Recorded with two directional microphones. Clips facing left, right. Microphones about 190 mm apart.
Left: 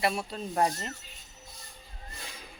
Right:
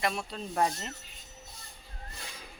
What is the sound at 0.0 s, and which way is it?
Speech, 5° left (ahead or behind).